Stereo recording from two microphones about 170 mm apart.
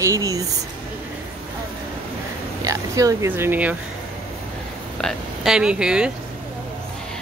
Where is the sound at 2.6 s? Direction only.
20° right (ahead or behind).